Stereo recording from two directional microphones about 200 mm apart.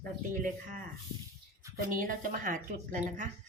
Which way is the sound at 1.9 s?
45° right (ahead or behind).